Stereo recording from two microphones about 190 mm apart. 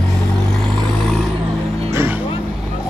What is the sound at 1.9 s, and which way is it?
Music, 15° right (ahead or behind).